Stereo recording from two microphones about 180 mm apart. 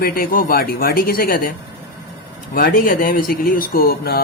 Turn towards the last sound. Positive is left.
turn(degrees=55)  # may be behind; listen again after turning